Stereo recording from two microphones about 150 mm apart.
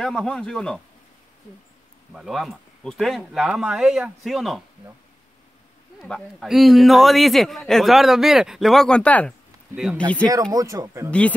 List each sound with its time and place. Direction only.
0.0 s a man's voice: 5° left (ahead or behind)
2.1 s a man's voice: centre (ahead or behind)
5.9 s a man's voice: centre (ahead or behind)
9.8 s a man's voice: centre (ahead or behind)
10.5 s speech: 25° right (ahead or behind)
11.1 s speech: 10° left (ahead or behind)